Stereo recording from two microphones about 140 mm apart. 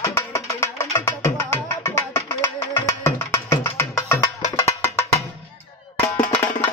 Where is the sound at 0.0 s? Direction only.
25° left (ahead or behind).